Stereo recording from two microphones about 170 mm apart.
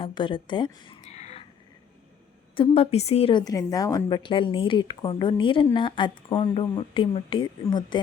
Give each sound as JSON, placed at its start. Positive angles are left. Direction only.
{"t": 0.0, "sound": "a woman's voice", "side_deg": 30}
{"t": 1.0, "sound": "a sound", "side_deg": 40}
{"t": 2.6, "sound": "a woman's voice", "side_deg": 35}
{"t": 3.4, "sound": "a woman's voice", "side_deg": 20}